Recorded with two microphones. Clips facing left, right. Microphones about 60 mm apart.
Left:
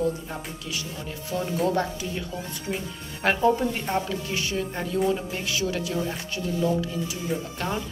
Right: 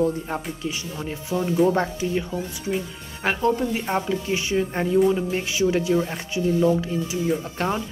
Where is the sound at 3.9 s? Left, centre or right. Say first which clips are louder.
Right 4 dB; right.